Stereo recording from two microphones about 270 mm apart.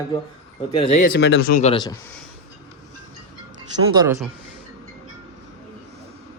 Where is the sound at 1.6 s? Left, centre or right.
Centre.